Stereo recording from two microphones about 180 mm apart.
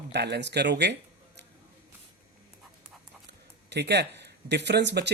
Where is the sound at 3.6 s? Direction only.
70° right (ahead or behind).